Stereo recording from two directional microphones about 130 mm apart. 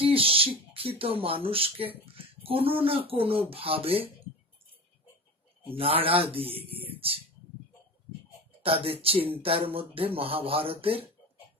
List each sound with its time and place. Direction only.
0.0 s a sound: 45° right (ahead or behind)
2.1 s speech: 45° right (ahead or behind)
5.7 s speech: 45° right (ahead or behind)
8.6 s speech: 45° right (ahead or behind)